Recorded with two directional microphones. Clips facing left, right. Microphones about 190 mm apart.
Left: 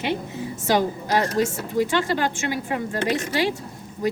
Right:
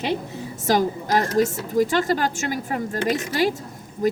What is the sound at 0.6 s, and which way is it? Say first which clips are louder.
A woman's voice: right 1 dB; 45° right (ahead or behind).